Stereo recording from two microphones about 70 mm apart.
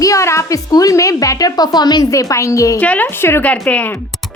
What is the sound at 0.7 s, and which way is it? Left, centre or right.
A woman's voice, left.